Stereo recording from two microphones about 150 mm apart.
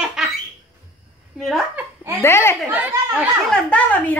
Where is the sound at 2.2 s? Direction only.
15° left (ahead or behind).